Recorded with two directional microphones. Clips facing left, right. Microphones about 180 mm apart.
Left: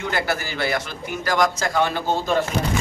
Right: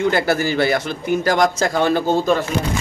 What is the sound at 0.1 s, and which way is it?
A man's voice, 30° right (ahead or behind).